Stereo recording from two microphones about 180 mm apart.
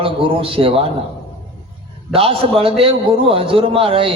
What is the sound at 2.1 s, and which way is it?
A man's voice, 30° right (ahead or behind).